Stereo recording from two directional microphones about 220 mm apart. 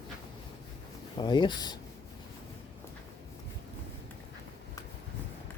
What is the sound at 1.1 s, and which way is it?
Speech, 20° left (ahead or behind).